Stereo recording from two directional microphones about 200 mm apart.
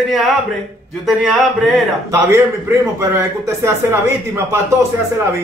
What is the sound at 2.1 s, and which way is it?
A man's voice, 15° right (ahead or behind).